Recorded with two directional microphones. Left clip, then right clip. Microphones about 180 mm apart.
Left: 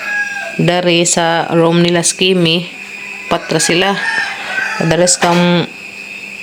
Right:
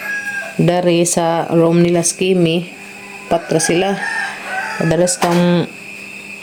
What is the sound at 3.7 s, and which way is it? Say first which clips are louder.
Speech: left 3 dB; 5° left (ahead or behind).